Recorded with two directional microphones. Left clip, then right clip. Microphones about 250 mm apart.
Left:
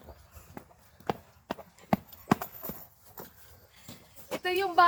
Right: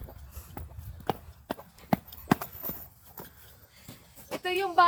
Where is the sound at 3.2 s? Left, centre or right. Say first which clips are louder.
Even; right; by 4.8 s centre.